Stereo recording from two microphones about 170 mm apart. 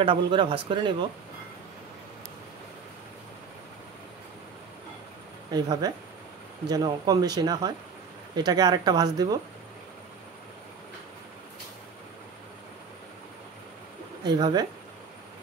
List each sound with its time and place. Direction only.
0.0 s speech: 30° right (ahead or behind)
5.5 s speech: 25° right (ahead or behind)
14.2 s speech: 25° right (ahead or behind)